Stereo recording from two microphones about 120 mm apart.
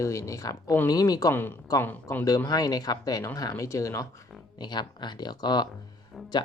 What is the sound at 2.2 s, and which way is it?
Speech, 30° left (ahead or behind).